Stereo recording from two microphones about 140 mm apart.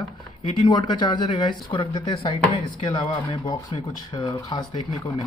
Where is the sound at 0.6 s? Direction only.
30° left (ahead or behind).